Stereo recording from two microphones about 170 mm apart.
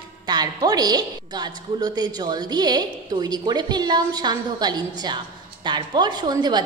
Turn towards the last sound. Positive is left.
turn(degrees=-25)  # may be behind; listen again after turning